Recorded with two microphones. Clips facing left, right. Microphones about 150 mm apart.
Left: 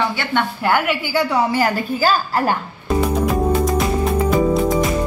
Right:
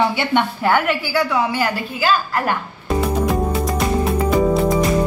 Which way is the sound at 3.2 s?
Centre (ahead or behind).